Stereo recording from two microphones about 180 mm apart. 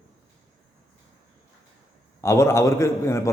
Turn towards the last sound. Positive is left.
turn(degrees=15)  # may be behind; listen again after turning